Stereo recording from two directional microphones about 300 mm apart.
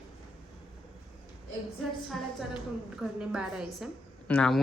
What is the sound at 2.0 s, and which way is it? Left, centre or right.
Speech, centre.